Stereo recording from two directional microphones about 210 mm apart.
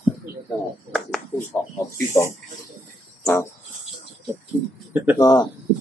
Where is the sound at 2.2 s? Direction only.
15° left (ahead or behind).